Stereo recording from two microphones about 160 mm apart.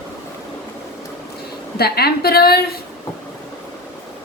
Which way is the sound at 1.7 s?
80° left.